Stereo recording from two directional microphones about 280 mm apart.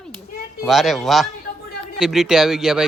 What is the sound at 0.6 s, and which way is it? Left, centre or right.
Speech, centre.